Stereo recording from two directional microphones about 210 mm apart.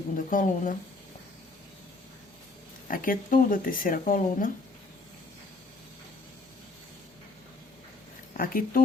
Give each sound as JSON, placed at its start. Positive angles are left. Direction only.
{"t": 0.2, "sound": "speech", "side_deg": 40}
{"t": 2.8, "sound": "speech", "side_deg": 40}
{"t": 8.3, "sound": "speech", "side_deg": 40}